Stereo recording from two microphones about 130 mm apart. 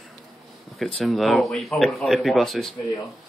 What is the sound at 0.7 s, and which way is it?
Speech, centre (ahead or behind).